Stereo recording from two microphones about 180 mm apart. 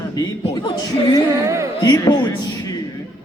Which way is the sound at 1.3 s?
15° right (ahead or behind).